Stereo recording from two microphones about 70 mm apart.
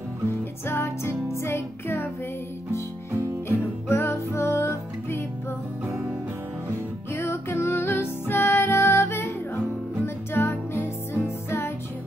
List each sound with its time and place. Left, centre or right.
0.7 s music: left
3.4 s music: left
7.2 s music: left